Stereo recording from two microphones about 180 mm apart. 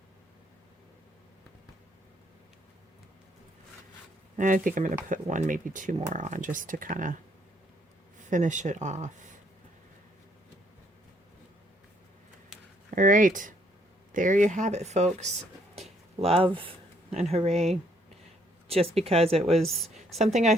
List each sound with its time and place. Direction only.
4.4 s speech: 45° right (ahead or behind)
8.3 s speech: 45° right (ahead or behind)
13.0 s speech: 45° right (ahead or behind)
19.6 s a woman's voice: centre (ahead or behind)
20.1 s speech: 40° right (ahead or behind)